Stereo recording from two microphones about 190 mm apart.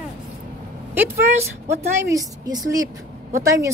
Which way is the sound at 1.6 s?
15° right (ahead or behind).